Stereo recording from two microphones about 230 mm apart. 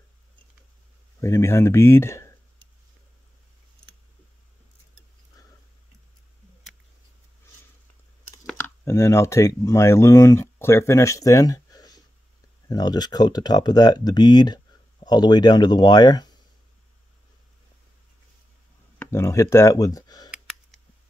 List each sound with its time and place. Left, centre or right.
1.2 s speech: centre
8.5 s speech: centre
18.9 s speech: centre